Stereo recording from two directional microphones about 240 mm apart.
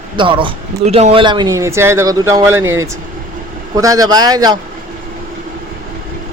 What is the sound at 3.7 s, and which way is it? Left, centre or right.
Speech, centre.